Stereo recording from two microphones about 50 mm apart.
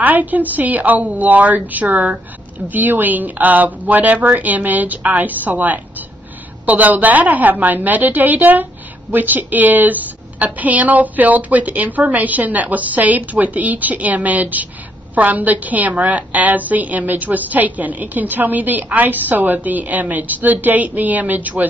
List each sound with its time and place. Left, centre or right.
0.0 s a woman's voice: right